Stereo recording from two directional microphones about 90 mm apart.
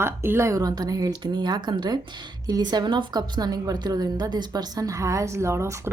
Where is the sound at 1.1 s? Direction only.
60° right (ahead or behind).